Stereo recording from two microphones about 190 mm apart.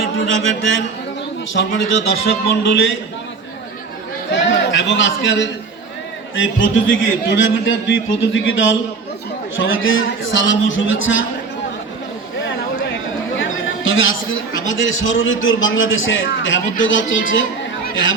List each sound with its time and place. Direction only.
0.0 s mantra: 85° left
1.5 s a man's voice: 80° left
4.4 s a man's voice: 80° left
13.3 s chatter: 90° left
14.7 s a man's voice: 90° left